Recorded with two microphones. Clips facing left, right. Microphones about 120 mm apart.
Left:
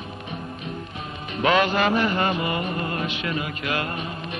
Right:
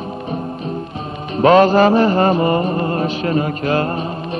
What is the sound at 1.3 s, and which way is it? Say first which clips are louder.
Music: right 10 dB; 35° right (ahead or behind).